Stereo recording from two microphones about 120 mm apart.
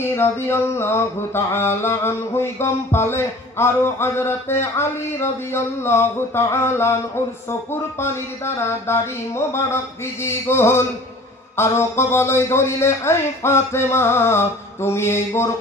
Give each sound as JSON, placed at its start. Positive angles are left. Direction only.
{"t": 0.0, "sound": "mantra", "side_deg": 20}